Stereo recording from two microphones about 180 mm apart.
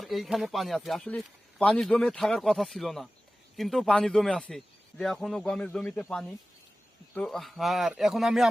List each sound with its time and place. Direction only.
0.0 s speech: centre (ahead or behind)